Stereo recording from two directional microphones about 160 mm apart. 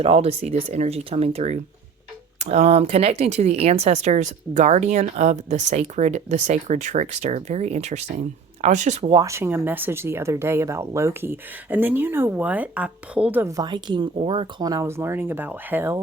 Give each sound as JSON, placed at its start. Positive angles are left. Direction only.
{"t": 0.0, "sound": "speech", "side_deg": -35}
{"t": 9.2, "sound": "speech", "side_deg": -15}
{"t": 13.6, "sound": "speech", "side_deg": -25}